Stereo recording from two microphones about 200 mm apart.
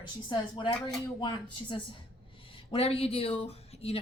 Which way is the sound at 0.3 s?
20° left (ahead or behind).